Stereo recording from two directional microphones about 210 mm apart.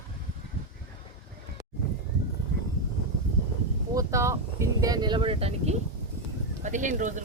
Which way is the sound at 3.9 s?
15° right (ahead or behind).